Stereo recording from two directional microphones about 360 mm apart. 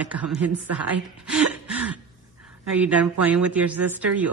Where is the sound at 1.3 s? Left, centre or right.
Centre.